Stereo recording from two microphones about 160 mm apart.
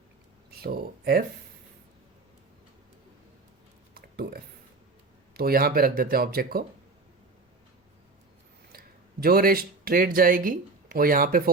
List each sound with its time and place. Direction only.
0.5 s speech: 70° right (ahead or behind)
3.9 s a sound: 70° right (ahead or behind)
5.3 s speech: 70° right (ahead or behind)
9.2 s speech: 70° right (ahead or behind)